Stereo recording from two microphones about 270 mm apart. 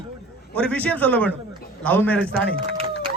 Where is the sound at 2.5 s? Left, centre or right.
Right.